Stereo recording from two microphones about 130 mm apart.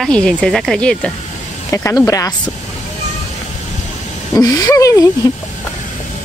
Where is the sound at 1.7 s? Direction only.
25° left (ahead or behind).